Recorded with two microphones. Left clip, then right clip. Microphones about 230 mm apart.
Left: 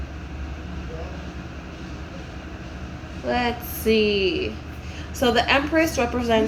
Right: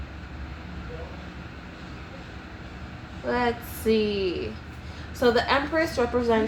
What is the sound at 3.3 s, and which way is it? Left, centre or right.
Speech, centre.